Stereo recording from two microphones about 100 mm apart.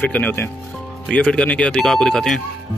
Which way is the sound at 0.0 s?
15° left (ahead or behind).